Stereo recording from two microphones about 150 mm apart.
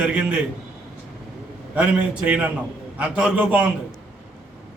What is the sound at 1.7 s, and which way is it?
A man's voice, 10° right (ahead or behind).